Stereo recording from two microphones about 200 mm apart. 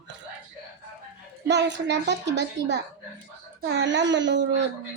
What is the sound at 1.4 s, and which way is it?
A child's voice, 60° right (ahead or behind).